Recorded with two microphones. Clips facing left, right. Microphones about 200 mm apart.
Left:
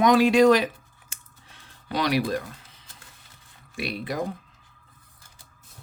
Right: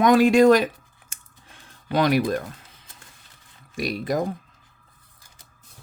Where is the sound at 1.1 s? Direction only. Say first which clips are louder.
Right 2 dB; 50° right (ahead or behind).